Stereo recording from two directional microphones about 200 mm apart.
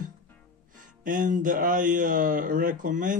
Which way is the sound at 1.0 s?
40° right (ahead or behind).